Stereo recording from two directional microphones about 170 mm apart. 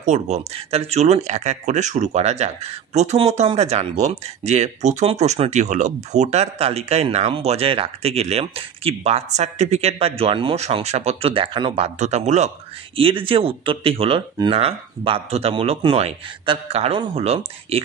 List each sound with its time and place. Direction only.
0.0 s speech: 45° right (ahead or behind)